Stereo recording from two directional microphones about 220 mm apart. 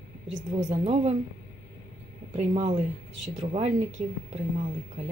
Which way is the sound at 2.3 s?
25° right (ahead or behind).